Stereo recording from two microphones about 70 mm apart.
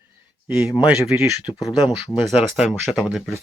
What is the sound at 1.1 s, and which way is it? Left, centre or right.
Speech, right.